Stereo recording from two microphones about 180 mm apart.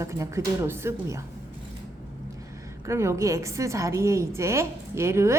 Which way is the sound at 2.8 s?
15° right (ahead or behind).